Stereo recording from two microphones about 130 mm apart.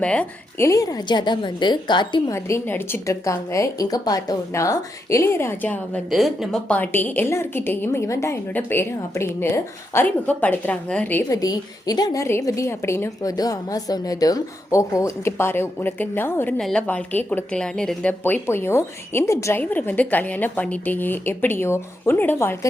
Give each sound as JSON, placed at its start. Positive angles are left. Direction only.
{"t": 0.0, "sound": "a woman's voice", "side_deg": 10}
{"t": 0.6, "sound": "a woman's voice", "side_deg": 25}
{"t": 2.3, "sound": "a woman's voice", "side_deg": 20}
{"t": 6.1, "sound": "a woman's voice", "side_deg": 0}
{"t": 6.7, "sound": "a woman's voice", "side_deg": 10}
{"t": 11.3, "sound": "a woman's voice", "side_deg": 30}
{"t": 16.6, "sound": "a woman's voice", "side_deg": 5}
{"t": 18.2, "sound": "a woman's voice", "side_deg": 15}